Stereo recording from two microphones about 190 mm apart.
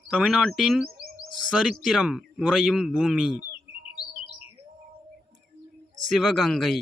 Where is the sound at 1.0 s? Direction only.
55° right (ahead or behind).